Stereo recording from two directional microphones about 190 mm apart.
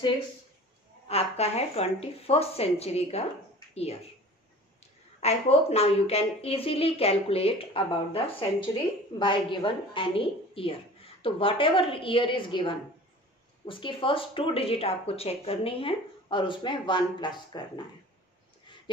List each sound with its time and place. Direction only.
1.0 s a woman's voice: 35° left (ahead or behind)
5.2 s a woman's voice: 35° left (ahead or behind)